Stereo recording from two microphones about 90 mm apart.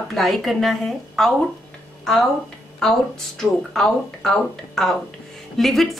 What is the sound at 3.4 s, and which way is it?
A woman's voice, 5° left (ahead or behind).